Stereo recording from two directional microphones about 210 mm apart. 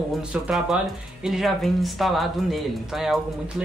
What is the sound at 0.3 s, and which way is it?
Speech, 5° right (ahead or behind).